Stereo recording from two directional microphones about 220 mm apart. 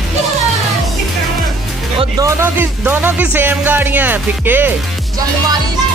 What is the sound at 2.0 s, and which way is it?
Music, 15° right (ahead or behind).